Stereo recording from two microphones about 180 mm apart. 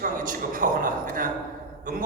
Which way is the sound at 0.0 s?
50° right (ahead or behind).